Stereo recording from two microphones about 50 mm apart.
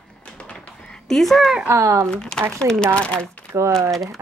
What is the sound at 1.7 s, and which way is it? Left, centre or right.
Speech, right.